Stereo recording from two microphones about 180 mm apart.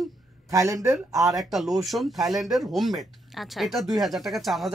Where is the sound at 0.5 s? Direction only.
15° right (ahead or behind).